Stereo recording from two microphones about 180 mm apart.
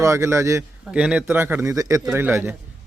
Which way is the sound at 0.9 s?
5° right (ahead or behind).